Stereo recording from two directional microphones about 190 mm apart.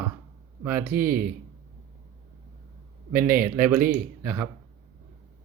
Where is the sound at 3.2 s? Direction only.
45° right (ahead or behind).